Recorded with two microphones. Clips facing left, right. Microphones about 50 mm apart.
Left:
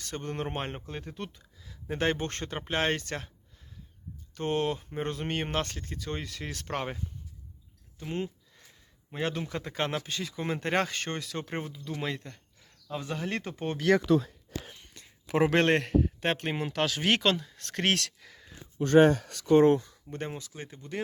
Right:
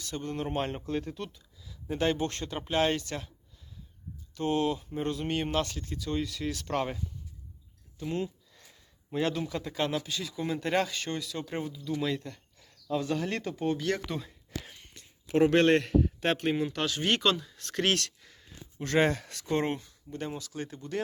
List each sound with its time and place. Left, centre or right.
0.0 s speech: left
4.4 s speech: left
6.7 s speech: left
8.5 s a sound: centre
9.1 s speech: left
12.1 s speech: left
15.3 s a man's voice: left
15.6 s speech: left
16.6 s speech: left
17.3 s speech: left
17.9 s speech: left
20.3 s speech: centre